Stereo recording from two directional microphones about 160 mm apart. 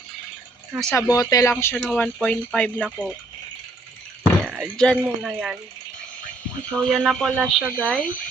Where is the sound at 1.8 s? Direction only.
5° left (ahead or behind).